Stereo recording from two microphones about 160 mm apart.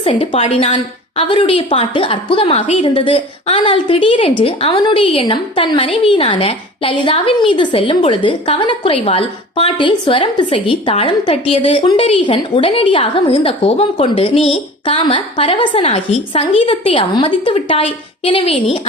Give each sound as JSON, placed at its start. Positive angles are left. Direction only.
{"t": 0.0, "sound": "a woman's voice", "side_deg": 35}